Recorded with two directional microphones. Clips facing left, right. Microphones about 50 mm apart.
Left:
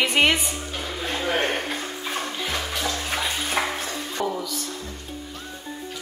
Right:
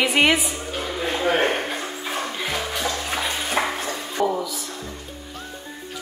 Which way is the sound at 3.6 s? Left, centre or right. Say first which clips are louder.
Right 2 dB; centre.